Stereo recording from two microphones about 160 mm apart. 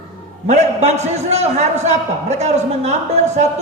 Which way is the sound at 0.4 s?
45° right (ahead or behind).